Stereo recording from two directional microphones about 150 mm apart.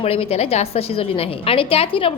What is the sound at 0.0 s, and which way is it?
A woman's voice, 40° left (ahead or behind).